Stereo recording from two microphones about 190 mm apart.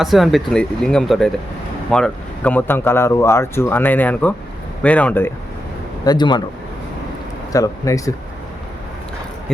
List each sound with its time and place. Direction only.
0.0 s speech: centre (ahead or behind)
6.1 s speech: 25° left (ahead or behind)
7.5 s speech: 15° left (ahead or behind)